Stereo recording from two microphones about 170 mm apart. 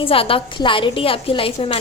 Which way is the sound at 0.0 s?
30° left (ahead or behind).